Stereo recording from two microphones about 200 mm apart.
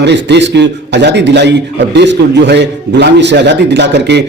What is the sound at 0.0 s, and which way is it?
A man's voice, 60° right (ahead or behind).